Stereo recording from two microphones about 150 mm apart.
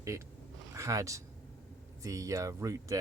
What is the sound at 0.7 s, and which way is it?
Speech, 20° right (ahead or behind).